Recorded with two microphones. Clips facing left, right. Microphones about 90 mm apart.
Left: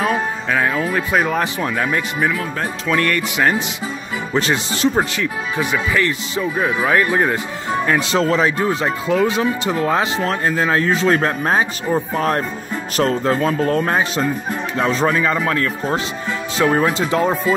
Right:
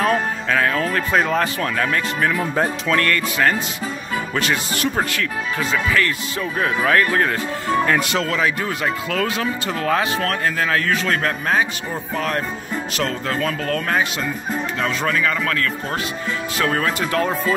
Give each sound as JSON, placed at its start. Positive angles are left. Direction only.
{"t": 0.0, "sound": "speech", "side_deg": 5}
{"t": 2.3, "sound": "speech", "side_deg": -15}
{"t": 2.9, "sound": "speech", "side_deg": 15}
{"t": 8.0, "sound": "speech", "side_deg": 30}